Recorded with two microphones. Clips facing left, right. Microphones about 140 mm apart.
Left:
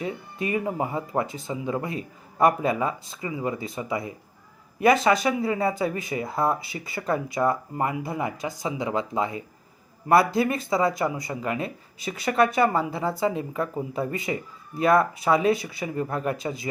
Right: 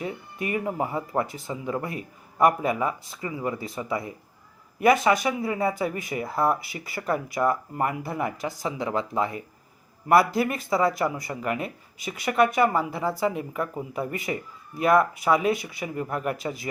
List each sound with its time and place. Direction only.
0.0 s speech: 25° left (ahead or behind)